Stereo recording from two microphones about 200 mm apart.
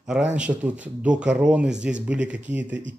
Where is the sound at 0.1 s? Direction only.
5° right (ahead or behind).